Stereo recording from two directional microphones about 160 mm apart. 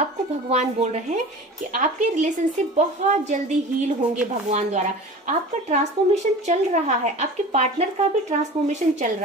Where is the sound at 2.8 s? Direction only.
45° right (ahead or behind).